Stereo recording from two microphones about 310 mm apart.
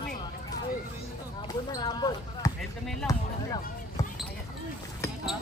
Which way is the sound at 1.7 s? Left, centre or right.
Centre.